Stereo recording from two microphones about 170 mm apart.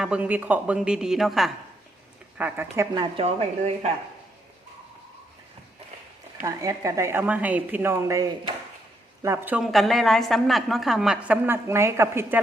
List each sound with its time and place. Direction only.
0.0 s a woman's voice: 5° right (ahead or behind)
2.4 s a woman's voice: 10° right (ahead or behind)
2.9 s a woman's voice: 30° right (ahead or behind)
6.4 s a woman's voice: 20° right (ahead or behind)
9.7 s a woman's voice: centre (ahead or behind); by 12.4 s 15° right (ahead or behind)